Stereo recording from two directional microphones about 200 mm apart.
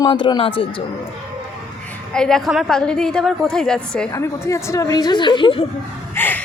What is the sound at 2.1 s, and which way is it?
A woman's voice, 5° left (ahead or behind).